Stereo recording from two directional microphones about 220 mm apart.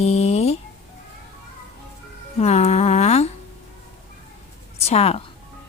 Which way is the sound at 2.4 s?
30° left (ahead or behind).